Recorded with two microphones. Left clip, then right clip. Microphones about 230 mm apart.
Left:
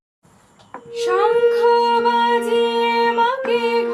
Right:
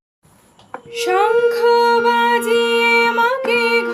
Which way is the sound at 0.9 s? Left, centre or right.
Right.